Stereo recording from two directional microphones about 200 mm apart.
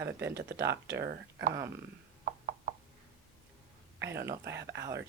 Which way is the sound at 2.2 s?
35° right (ahead or behind).